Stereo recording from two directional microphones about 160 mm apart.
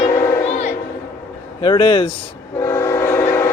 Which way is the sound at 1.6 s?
30° left (ahead or behind).